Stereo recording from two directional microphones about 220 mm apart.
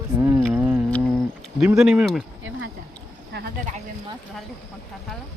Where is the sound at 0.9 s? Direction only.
5° left (ahead or behind).